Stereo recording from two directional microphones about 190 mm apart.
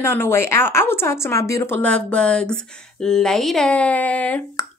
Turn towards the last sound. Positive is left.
turn(degrees=10)  # may be behind; listen again after turning